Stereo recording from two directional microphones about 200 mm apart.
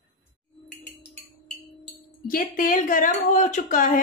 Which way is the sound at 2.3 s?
45° left (ahead or behind).